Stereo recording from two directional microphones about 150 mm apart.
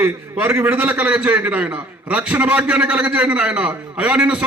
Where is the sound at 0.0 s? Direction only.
15° right (ahead or behind).